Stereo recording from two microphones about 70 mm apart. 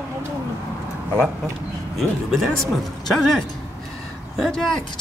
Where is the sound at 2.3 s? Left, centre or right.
Centre.